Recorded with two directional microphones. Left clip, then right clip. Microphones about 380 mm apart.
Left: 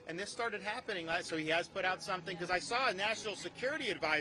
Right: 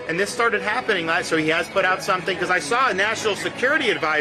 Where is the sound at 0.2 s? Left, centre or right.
Left.